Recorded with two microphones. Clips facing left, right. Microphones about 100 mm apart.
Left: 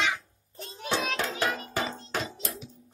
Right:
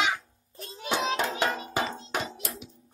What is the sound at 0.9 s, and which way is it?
Music, 20° right (ahead or behind).